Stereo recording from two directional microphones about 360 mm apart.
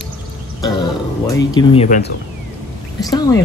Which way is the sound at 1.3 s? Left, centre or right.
Centre.